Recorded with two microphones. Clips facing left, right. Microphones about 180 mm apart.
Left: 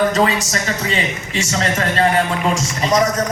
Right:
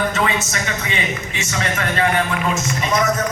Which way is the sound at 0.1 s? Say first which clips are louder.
Left 4 dB; 35° left (ahead or behind).